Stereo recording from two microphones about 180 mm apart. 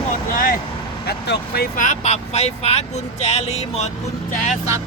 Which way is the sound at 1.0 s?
65° left (ahead or behind).